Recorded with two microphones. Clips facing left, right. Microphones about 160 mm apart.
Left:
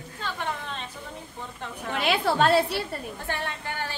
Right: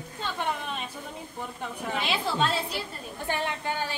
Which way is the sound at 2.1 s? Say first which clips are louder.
Left 8 dB; 65° left (ahead or behind).